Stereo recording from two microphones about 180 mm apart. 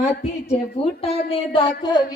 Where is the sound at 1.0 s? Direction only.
35° left (ahead or behind).